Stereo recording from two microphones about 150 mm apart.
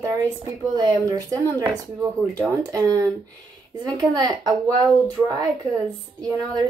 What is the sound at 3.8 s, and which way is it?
Speech, 25° right (ahead or behind).